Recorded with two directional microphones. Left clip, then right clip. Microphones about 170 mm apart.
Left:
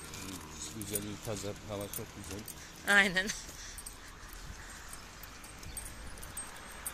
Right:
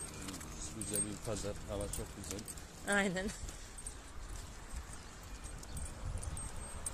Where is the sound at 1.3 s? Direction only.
45° left (ahead or behind).